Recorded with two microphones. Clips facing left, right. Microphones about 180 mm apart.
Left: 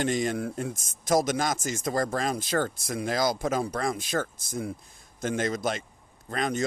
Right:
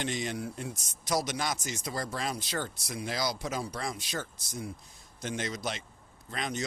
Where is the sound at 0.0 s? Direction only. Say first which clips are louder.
Left 7 dB; 50° left (ahead or behind).